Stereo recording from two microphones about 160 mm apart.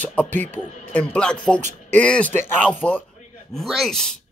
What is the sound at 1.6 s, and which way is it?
Speech, 50° right (ahead or behind).